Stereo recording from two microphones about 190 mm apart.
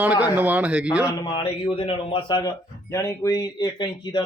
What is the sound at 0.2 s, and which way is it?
Speech, 10° right (ahead or behind).